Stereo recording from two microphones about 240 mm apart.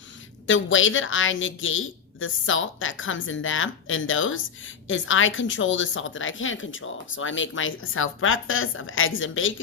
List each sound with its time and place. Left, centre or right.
0.4 s a woman's voice: left